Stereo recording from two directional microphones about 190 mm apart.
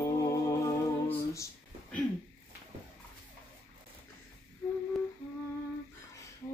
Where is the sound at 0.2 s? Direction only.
15° left (ahead or behind).